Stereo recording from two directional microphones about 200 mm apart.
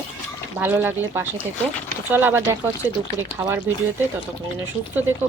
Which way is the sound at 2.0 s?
10° right (ahead or behind).